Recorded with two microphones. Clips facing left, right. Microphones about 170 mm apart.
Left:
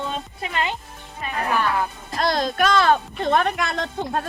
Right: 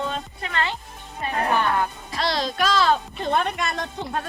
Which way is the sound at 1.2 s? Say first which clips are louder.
Right 2 dB; 35° right (ahead or behind).